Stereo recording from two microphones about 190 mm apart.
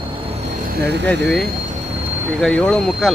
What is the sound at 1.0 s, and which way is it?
Speech, 5° left (ahead or behind).